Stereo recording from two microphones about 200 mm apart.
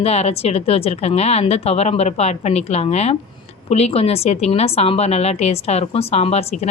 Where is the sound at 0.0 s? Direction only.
30° left (ahead or behind).